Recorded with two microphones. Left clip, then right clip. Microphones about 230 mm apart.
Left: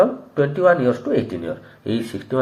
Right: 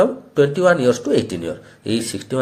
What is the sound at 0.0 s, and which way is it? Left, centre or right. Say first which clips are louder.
Speech: right 2 dB; right.